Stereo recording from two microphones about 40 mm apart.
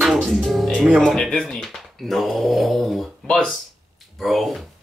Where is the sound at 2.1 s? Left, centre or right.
Centre.